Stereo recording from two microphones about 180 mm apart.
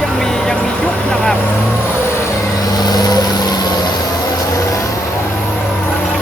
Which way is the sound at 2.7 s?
20° left (ahead or behind).